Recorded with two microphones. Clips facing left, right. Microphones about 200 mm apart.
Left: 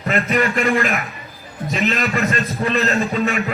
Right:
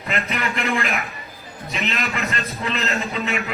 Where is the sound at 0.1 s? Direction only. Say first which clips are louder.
Left 7 dB; 50° left (ahead or behind).